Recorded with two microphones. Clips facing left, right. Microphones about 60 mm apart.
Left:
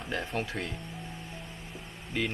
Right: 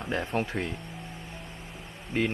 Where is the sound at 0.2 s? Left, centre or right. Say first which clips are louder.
Right 4 dB; centre.